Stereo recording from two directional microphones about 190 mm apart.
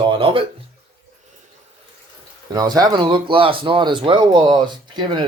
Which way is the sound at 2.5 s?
20° right (ahead or behind).